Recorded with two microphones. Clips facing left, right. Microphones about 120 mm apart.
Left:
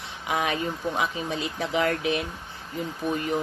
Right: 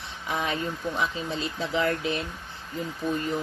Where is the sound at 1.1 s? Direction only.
15° left (ahead or behind).